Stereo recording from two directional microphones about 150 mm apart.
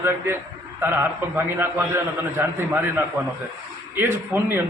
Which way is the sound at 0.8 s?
15° right (ahead or behind).